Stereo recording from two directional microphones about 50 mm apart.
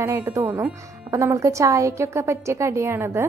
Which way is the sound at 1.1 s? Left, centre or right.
Right.